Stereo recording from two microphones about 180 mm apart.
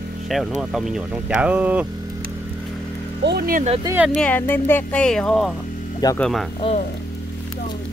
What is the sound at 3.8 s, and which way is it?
Speech, 5° right (ahead or behind).